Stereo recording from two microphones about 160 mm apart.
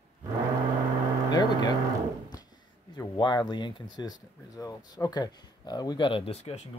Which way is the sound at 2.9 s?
25° left (ahead or behind).